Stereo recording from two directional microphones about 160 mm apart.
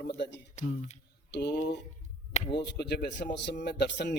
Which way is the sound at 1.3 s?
90° left.